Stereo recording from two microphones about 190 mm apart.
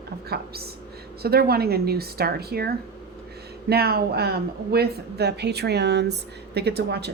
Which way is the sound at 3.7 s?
55° right (ahead or behind).